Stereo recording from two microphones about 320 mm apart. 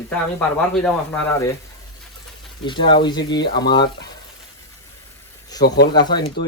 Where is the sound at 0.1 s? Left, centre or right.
Centre.